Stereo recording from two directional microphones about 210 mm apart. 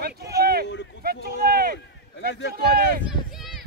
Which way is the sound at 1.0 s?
45° right (ahead or behind).